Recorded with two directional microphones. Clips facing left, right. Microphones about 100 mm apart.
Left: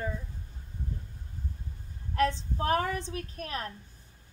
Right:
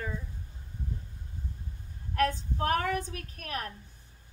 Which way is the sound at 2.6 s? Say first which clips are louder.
Even; 30° left (ahead or behind).